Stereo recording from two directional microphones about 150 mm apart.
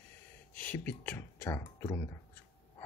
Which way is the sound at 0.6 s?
10° left (ahead or behind).